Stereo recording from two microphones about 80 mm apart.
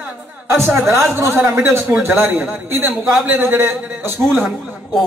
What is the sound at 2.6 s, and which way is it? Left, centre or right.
A man's voice, right.